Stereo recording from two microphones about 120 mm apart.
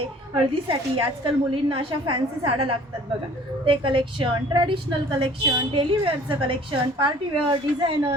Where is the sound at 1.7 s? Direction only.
45° right (ahead or behind).